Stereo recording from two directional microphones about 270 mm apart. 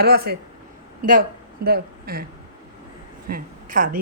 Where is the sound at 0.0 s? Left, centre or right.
Right.